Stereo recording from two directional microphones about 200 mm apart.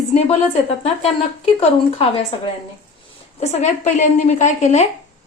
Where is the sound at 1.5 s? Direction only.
30° left (ahead or behind).